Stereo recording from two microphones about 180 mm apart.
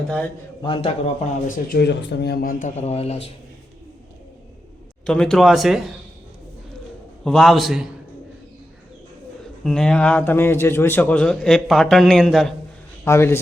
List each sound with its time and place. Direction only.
0.6 s speech: 30° left (ahead or behind)
1.7 s a man's voice: 65° left (ahead or behind); by 3.3 s 35° left (ahead or behind)
5.0 s a man's voice: 5° left (ahead or behind)
7.3 s a man's voice: centre (ahead or behind)
9.6 s a man's voice: 5° left (ahead or behind)
13.1 s a man's voice: 15° left (ahead or behind)